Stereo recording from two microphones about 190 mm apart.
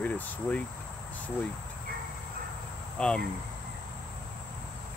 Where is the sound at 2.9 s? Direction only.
5° left (ahead or behind).